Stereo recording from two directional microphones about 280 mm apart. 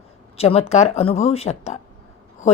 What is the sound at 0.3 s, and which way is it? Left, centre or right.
A woman's voice, left.